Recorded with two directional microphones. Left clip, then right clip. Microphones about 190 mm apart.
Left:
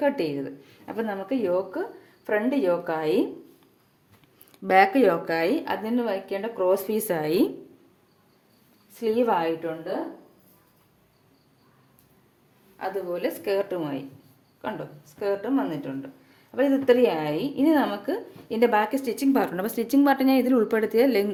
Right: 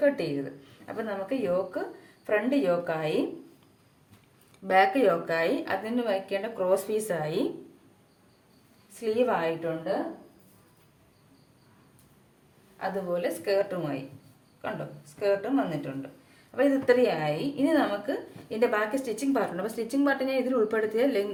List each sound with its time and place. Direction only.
0.0 s a woman's voice: 40° left (ahead or behind)
4.5 s a woman's voice: 50° left (ahead or behind)
9.0 s a woman's voice: 35° left (ahead or behind)
12.8 s a woman's voice: 40° left (ahead or behind)
15.2 s a woman's voice: 30° left (ahead or behind); by 21.2 s 45° left (ahead or behind)